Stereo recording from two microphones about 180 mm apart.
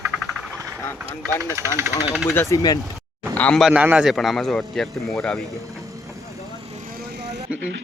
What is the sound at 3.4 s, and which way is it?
A man's voice, 5° left (ahead or behind).